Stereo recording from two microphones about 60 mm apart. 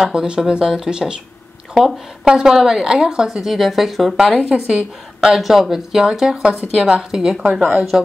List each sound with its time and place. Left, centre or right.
0.1 s speech: centre
2.2 s speech: centre